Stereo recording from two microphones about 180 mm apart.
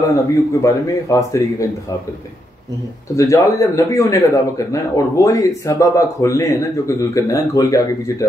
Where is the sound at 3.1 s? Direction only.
20° left (ahead or behind).